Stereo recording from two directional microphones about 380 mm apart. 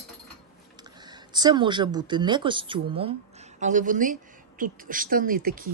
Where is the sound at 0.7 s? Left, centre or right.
Centre.